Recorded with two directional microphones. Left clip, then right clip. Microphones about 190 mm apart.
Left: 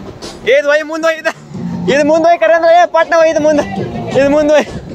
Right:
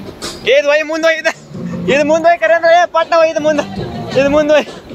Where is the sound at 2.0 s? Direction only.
50° left (ahead or behind); by 4.7 s 30° left (ahead or behind).